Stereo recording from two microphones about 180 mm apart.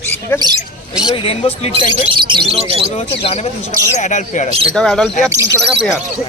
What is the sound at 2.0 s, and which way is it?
Speech, 30° right (ahead or behind).